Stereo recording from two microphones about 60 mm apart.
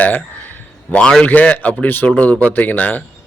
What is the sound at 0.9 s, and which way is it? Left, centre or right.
A man's voice, left.